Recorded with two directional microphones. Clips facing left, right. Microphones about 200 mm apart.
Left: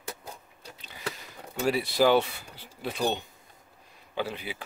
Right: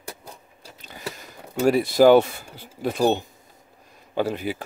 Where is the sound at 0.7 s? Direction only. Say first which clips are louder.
Right 6 dB; 45° right (ahead or behind).